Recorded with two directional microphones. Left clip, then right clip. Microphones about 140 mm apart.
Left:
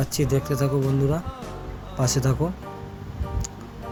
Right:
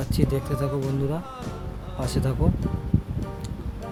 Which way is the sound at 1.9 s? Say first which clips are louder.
Left 4 dB; 10° left (ahead or behind).